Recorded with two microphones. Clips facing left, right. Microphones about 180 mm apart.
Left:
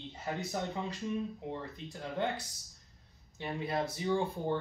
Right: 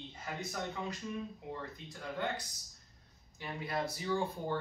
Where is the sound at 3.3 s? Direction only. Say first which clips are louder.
Left 4 dB; 25° left (ahead or behind).